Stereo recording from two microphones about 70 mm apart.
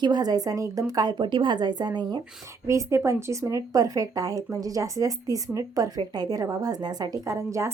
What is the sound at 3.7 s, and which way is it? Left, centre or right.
Speech, right.